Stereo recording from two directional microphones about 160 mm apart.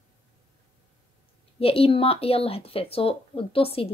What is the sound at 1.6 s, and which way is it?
A woman's voice, 35° left (ahead or behind).